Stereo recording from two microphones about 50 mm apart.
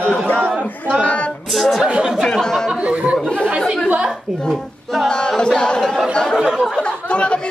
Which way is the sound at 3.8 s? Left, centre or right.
Right.